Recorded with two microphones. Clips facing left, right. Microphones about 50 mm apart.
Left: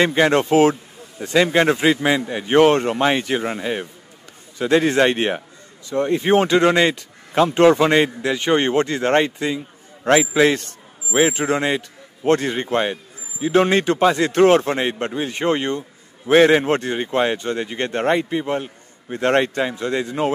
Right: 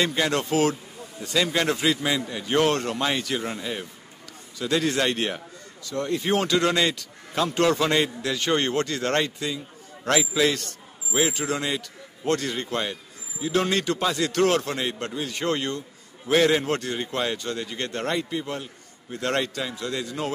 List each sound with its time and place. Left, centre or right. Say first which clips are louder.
0.0 s a man's voice: left 8 dB; left